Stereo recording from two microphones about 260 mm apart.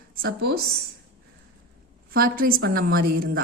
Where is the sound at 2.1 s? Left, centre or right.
Right.